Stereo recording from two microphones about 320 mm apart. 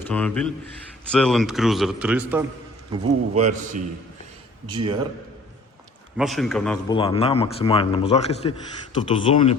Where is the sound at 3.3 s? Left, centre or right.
Right.